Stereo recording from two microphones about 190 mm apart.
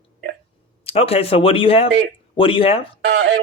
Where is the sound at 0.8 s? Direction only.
30° left (ahead or behind).